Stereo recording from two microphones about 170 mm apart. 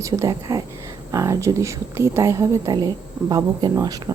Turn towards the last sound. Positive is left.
turn(degrees=-20)  # may be behind; listen again after turning